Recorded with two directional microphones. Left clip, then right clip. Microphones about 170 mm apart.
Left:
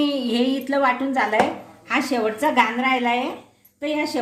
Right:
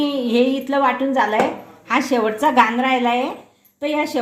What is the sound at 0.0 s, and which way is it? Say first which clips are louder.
A woman's voice: right 4 dB; 15° right (ahead or behind).